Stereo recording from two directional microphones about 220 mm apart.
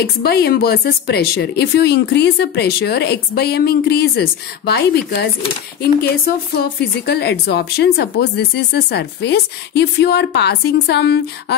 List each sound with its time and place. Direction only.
0.2 s a woman's voice: 45° left (ahead or behind)